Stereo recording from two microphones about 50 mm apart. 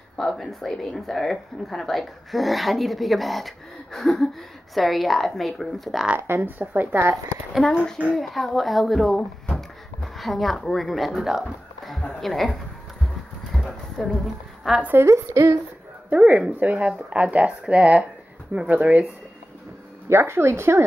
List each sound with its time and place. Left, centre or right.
0.2 s a woman's voice: centre
6.1 s speech: right
6.6 s speech: right
7.6 s speech: centre
8.2 s a woman's voice: centre
14.7 s a woman's voice: centre
15.0 s a woman's voice: right
16.1 s speech: right
20.1 s speech: right